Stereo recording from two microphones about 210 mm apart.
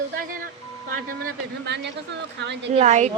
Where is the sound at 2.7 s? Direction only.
35° right (ahead or behind).